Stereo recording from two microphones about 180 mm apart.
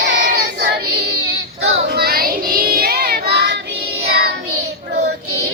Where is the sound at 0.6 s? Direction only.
65° right (ahead or behind).